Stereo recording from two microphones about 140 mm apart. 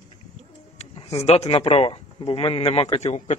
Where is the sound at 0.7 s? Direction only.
45° left (ahead or behind).